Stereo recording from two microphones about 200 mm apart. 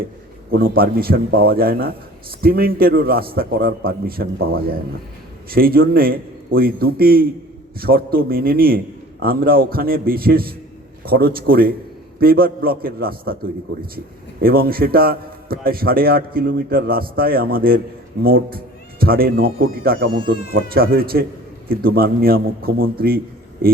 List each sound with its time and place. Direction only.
0.5 s a man's voice: 50° right (ahead or behind)
5.5 s a man's voice: 50° right (ahead or behind)